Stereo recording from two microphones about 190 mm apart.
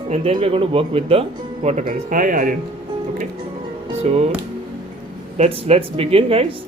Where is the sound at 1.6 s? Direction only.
40° right (ahead or behind).